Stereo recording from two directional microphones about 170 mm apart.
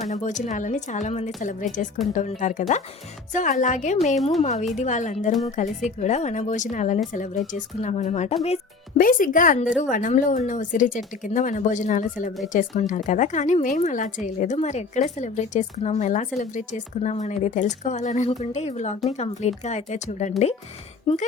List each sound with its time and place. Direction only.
0.0 s a woman's voice: 45° left (ahead or behind)
4.2 s a woman's voice: centre (ahead or behind)
4.7 s a woman's voice: 45° left (ahead or behind)
9.0 s a woman's voice: 55° left (ahead or behind)